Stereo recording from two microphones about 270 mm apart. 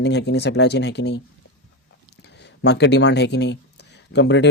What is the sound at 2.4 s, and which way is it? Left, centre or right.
Speech, left.